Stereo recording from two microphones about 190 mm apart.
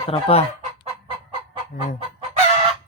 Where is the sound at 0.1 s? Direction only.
30° left (ahead or behind).